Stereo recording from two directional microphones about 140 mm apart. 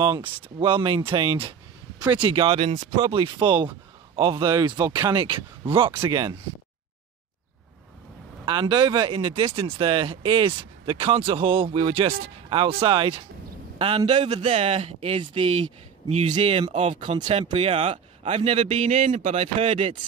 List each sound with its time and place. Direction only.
0.0 s speech: 30° right (ahead or behind)
8.5 s speech: 30° right (ahead or behind)
16.2 s a man's voice: 55° right (ahead or behind)
16.6 s a man's voice: 40° right (ahead or behind)
17.2 s a man's voice: 35° right (ahead or behind)